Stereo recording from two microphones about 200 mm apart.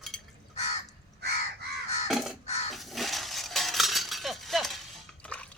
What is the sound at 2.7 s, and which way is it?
Chink, centre (ahead or behind).